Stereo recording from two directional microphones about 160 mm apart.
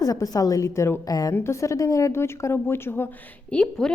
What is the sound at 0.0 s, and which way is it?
A woman's voice, 20° left (ahead or behind).